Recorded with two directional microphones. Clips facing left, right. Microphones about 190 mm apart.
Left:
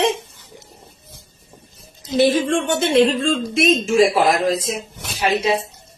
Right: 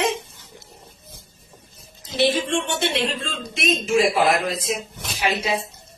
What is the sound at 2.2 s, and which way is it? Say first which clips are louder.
Speech: left 5 dB; 50° left (ahead or behind).